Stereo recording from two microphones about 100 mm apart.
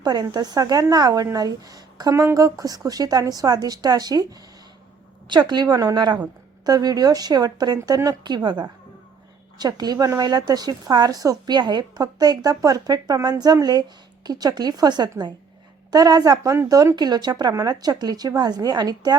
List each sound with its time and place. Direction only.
0.0 s a woman's voice: 45° right (ahead or behind)